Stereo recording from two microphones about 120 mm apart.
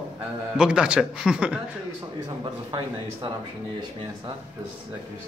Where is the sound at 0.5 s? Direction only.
5° right (ahead or behind).